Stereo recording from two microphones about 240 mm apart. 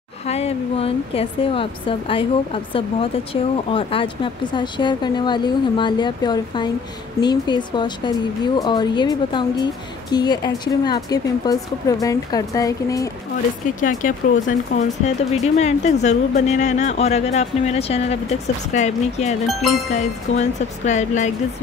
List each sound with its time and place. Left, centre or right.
0.3 s a woman's voice: left
13.7 s speech: left